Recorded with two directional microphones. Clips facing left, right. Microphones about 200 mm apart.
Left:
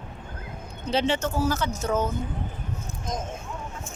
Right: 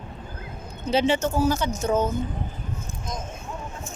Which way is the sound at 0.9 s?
10° right (ahead or behind).